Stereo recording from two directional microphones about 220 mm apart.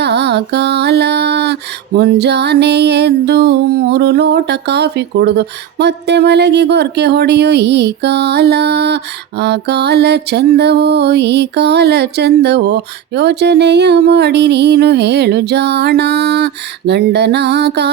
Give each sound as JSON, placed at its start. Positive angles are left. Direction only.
{"t": 0.0, "sound": "mantra", "side_deg": -50}
{"t": 2.0, "sound": "music", "side_deg": -50}